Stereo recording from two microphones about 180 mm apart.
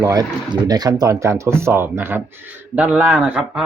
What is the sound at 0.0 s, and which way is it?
Speech, 20° right (ahead or behind).